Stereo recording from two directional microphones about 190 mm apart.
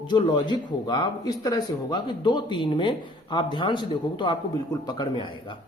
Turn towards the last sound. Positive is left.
turn(degrees=20)  # may be behind; listen again after turning